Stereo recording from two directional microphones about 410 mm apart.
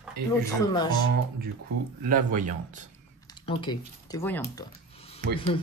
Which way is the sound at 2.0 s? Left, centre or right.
Centre.